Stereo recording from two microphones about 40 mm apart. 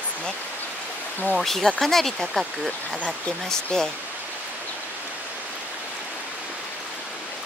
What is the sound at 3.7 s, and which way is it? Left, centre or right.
Speech, centre.